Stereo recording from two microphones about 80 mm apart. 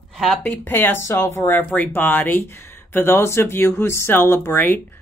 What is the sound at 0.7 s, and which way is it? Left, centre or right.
Speech, left.